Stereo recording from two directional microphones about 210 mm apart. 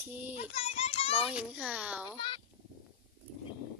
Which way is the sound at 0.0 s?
10° right (ahead or behind).